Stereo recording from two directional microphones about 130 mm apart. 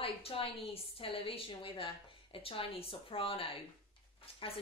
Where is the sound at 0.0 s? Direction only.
45° left (ahead or behind).